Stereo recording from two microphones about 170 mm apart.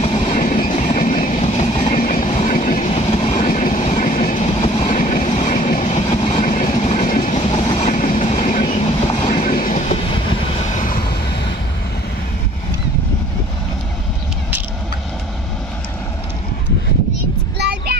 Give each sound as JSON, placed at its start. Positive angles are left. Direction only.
{"t": 0.1, "sound": "train", "side_deg": 40}
{"t": 4.9, "sound": "train", "side_deg": 45}
{"t": 17.6, "sound": "a sound", "side_deg": -75}